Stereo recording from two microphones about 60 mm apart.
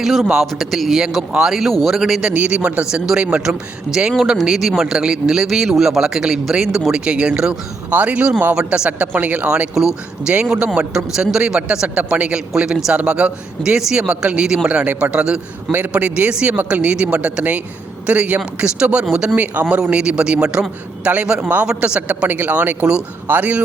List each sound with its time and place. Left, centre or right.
0.0 s a man's voice: centre
2.3 s a man's voice: right
9.7 s a man's voice: centre
10.3 s a man's voice: right
10.9 s a man's voice: centre
13.6 s a man's voice: centre
14.7 s a man's voice: right
22.3 s a man's voice: right